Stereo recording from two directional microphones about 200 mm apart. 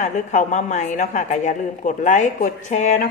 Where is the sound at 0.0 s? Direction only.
40° left (ahead or behind).